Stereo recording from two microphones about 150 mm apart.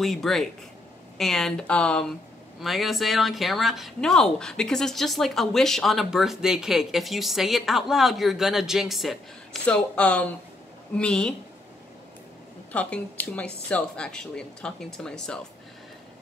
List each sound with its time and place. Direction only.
0.0 s speech: centre (ahead or behind)
12.7 s speech: 10° left (ahead or behind)